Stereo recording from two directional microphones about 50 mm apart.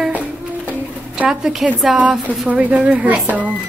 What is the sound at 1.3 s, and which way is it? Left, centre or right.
Speech, centre.